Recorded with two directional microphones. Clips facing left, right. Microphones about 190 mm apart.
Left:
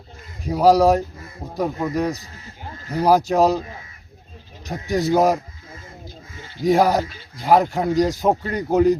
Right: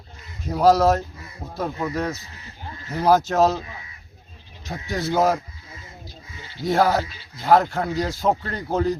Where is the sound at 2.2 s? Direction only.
40° left (ahead or behind).